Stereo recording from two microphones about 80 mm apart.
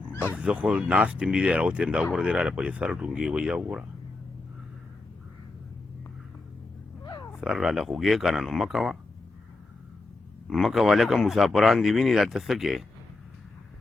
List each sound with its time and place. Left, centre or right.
0.1 s dog: left
0.3 s speech: centre
7.0 s a sound: left
7.3 s speech: centre
10.5 s speech: centre